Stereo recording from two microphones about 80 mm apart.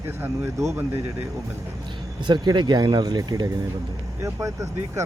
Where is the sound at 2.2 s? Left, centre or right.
Right.